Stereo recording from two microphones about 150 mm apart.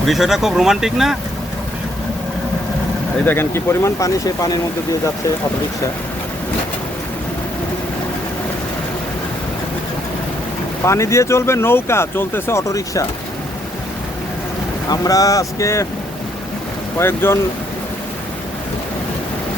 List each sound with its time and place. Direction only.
0.0 s speech: centre (ahead or behind)
3.2 s speech: 15° left (ahead or behind)
10.8 s speech: 20° left (ahead or behind)
14.8 s speech: 25° left (ahead or behind)
17.0 s speech: 15° left (ahead or behind)